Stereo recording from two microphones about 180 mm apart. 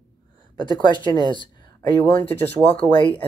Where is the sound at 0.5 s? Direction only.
25° left (ahead or behind).